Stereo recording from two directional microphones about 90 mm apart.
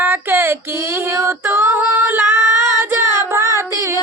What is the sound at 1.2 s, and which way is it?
Female singing, 25° right (ahead or behind).